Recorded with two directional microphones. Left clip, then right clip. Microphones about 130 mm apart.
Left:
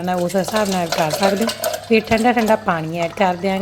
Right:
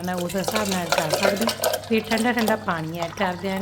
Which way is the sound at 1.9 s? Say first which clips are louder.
Left 12 dB; 25° left (ahead or behind).